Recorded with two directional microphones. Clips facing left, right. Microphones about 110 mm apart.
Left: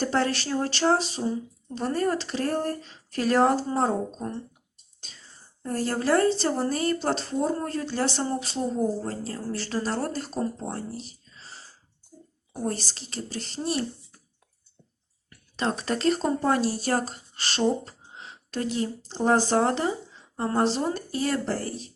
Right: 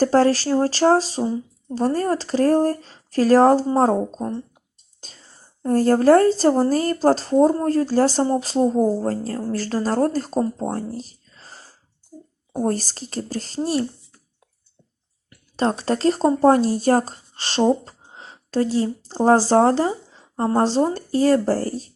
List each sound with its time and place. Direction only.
0.0 s speech: 35° right (ahead or behind)
4.9 s whispering: 40° right (ahead or behind)
5.6 s speech: 45° right (ahead or behind)
12.6 s speech: 45° right (ahead or behind)
15.5 s speech: 35° right (ahead or behind)